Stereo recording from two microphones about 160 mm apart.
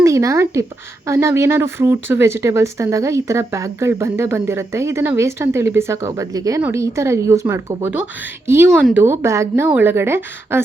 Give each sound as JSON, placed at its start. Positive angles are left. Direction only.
{"t": 0.0, "sound": "speech", "side_deg": -20}
{"t": 8.7, "sound": "a woman's voice", "side_deg": -5}
{"t": 9.0, "sound": "speech", "side_deg": -20}